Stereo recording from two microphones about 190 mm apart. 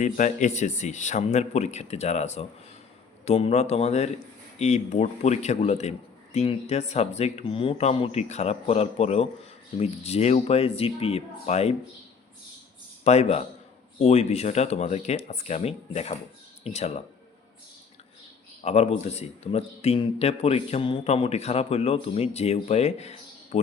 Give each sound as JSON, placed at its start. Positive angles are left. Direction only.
{"t": 0.0, "sound": "speech", "side_deg": 40}
{"t": 13.1, "sound": "speech", "side_deg": 35}
{"t": 18.6, "sound": "speech", "side_deg": 35}